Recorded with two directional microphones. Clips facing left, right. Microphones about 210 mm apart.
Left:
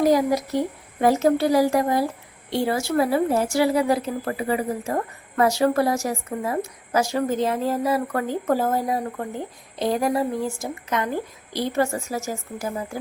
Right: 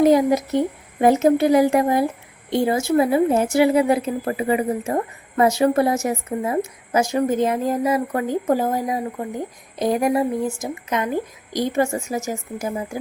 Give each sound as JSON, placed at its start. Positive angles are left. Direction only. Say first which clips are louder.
{"t": 0.0, "sound": "speech", "louder": "right 4 dB", "side_deg": -20}